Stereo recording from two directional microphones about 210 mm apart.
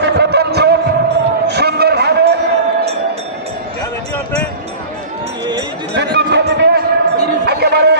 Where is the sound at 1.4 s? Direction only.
50° right (ahead or behind).